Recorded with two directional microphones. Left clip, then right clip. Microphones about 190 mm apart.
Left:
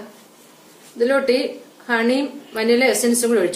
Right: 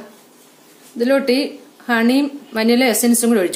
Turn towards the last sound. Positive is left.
turn(degrees=-50)  # may be behind; listen again after turning